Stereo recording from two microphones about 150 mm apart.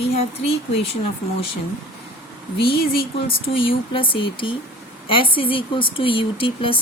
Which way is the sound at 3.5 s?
35° left (ahead or behind).